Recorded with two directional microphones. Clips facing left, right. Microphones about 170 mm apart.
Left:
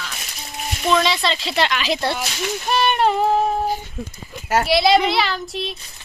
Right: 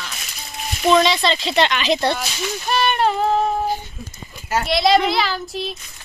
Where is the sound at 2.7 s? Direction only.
15° left (ahead or behind).